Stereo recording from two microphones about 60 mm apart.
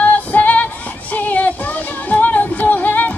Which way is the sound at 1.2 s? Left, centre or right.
Left.